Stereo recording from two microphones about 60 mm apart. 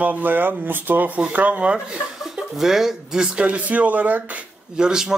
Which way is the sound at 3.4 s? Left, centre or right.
Right.